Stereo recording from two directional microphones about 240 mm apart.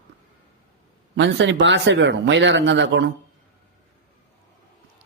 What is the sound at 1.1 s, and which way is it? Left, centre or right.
A man's voice, right.